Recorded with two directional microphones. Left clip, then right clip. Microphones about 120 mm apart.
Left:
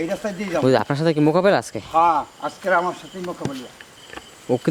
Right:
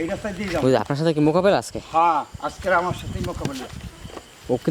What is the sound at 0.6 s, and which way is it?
Speech, centre (ahead or behind).